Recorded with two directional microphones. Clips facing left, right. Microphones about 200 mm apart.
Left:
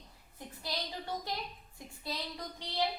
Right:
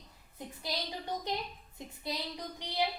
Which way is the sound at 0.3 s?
20° right (ahead or behind).